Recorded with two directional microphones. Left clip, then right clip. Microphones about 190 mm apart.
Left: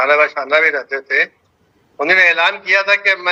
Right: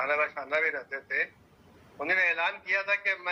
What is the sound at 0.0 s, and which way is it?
A man's voice, 45° left (ahead or behind).